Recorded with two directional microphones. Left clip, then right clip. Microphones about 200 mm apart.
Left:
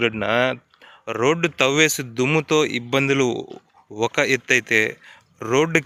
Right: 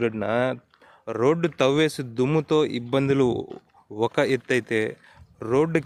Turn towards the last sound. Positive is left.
turn(degrees=-5)  # may be behind; listen again after turning